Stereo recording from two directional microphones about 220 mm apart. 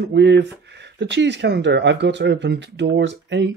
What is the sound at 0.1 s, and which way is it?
Speech, 50° right (ahead or behind).